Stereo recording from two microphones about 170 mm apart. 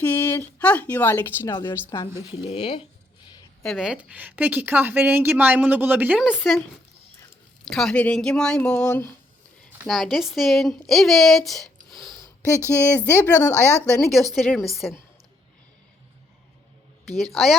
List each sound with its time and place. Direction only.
0.0 s speech: 15° left (ahead or behind); by 2.8 s 30° left (ahead or behind)
3.6 s a woman's voice: centre (ahead or behind)
7.7 s speech: 5° left (ahead or behind)
13.8 s speech: 5° left (ahead or behind)
17.3 s speech: centre (ahead or behind)